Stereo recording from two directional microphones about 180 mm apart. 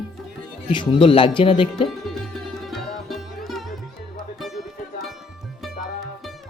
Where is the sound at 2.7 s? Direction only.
Centre (ahead or behind).